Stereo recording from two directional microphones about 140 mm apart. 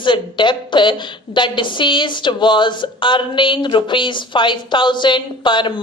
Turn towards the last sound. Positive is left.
turn(degrees=35)  # may be behind; listen again after turning